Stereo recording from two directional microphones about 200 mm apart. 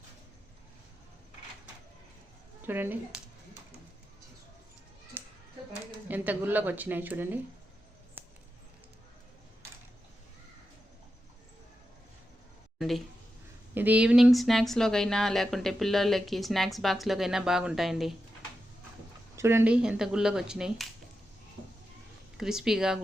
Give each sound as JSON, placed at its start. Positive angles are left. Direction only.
{"t": 2.6, "sound": "a woman's voice", "side_deg": -10}
{"t": 5.2, "sound": "children playing", "side_deg": -10}
{"t": 6.1, "sound": "a woman's voice", "side_deg": -10}
{"t": 8.2, "sound": "a sound", "side_deg": -10}
{"t": 13.7, "sound": "speech", "side_deg": -10}
{"t": 19.4, "sound": "speech", "side_deg": -10}
{"t": 22.4, "sound": "speech", "side_deg": 0}